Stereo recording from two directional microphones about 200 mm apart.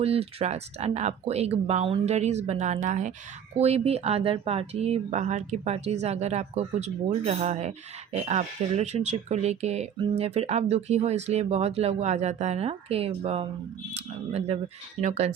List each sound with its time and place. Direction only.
0.0 s speech: 30° right (ahead or behind)